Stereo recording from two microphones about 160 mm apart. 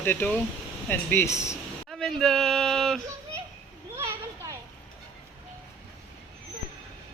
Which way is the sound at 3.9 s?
15° right (ahead or behind).